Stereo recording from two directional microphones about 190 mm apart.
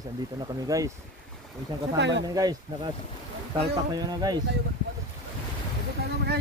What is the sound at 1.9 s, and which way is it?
Speech, 65° right (ahead or behind).